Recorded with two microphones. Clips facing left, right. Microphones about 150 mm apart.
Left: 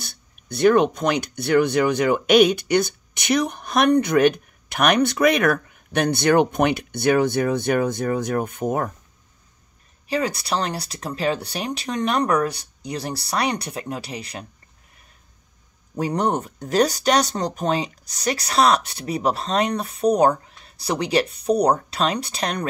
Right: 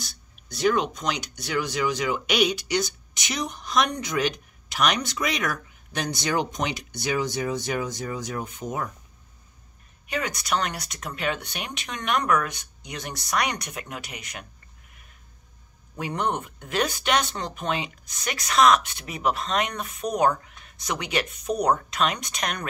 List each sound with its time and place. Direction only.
0.0 s speech: 55° left (ahead or behind)
10.0 s speech: 30° left (ahead or behind)
16.0 s speech: 40° left (ahead or behind)